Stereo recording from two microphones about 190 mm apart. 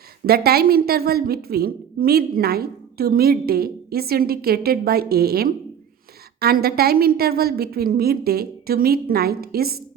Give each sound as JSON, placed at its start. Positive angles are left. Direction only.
{"t": 0.3, "sound": "a woman's voice", "side_deg": -55}